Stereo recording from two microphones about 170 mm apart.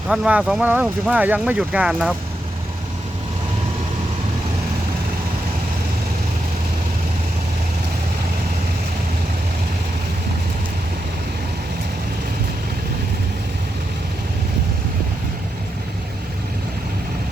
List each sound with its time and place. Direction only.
0.1 s speech: 5° right (ahead or behind)